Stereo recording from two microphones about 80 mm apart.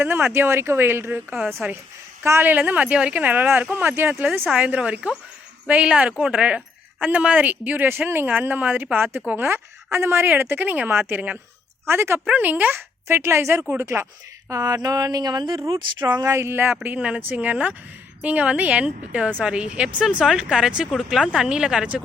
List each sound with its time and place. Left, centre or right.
0.3 s speech: right
2.4 s a woman's voice: right
11.9 s speech: right
12.4 s speech: right
12.7 s speech: right
14.5 s speech: right
15.7 s speech: right
16.2 s a woman's voice: right; by 22.0 s centre